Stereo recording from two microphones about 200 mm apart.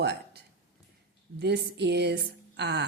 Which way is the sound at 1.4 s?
55° right (ahead or behind).